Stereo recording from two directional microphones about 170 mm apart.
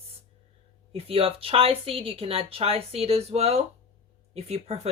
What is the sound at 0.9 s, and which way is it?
Speech, 35° right (ahead or behind).